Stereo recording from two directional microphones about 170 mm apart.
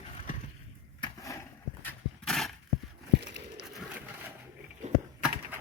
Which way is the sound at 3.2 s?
85° right.